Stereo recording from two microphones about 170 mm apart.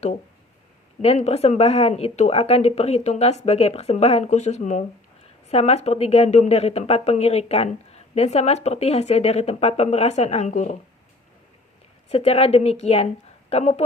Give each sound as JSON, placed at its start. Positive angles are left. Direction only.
{"t": 1.0, "sound": "a woman's voice", "side_deg": 40}
{"t": 12.0, "sound": "a woman's voice", "side_deg": 35}